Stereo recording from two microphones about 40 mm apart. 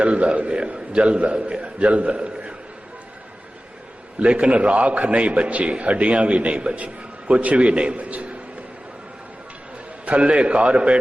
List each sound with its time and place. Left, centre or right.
0.0 s a man's voice: right
4.2 s a man's voice: right
10.1 s a man's voice: right